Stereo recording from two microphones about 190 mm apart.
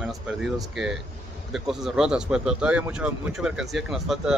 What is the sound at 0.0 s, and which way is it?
Speech, centre (ahead or behind).